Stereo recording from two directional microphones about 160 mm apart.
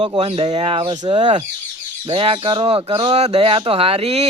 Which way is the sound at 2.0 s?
35° right (ahead or behind).